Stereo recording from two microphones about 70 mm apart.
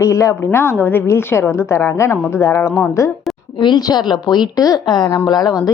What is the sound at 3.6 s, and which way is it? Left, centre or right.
A woman's voice, left.